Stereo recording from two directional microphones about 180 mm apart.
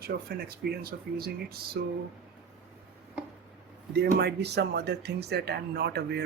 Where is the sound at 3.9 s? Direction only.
65° right (ahead or behind).